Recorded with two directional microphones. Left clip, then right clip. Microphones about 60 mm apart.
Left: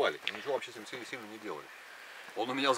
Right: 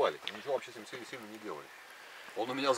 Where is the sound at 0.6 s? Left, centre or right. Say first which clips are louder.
Left 2 dB; left.